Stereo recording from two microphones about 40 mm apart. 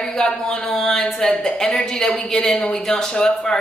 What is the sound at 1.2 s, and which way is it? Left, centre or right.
Speech, left.